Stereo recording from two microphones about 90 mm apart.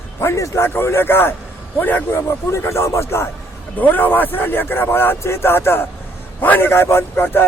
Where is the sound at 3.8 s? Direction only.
20° left (ahead or behind).